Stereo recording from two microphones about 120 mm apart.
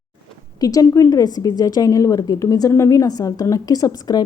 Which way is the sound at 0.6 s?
30° left (ahead or behind).